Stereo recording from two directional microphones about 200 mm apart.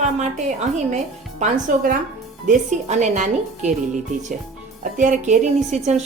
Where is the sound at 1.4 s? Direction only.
45° right (ahead or behind).